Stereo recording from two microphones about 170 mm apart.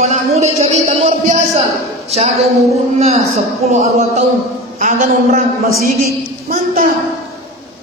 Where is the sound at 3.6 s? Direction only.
40° right (ahead or behind); by 6.9 s 55° right (ahead or behind).